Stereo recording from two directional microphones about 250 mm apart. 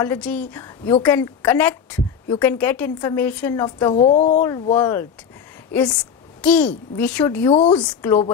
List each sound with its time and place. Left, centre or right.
0.0 s a woman's voice: centre
3.9 s a woman's voice: left
4.4 s a woman's voice: centre
7.4 s a woman's voice: left